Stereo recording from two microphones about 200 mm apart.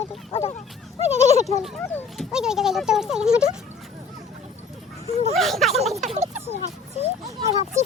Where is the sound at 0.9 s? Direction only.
35° right (ahead or behind).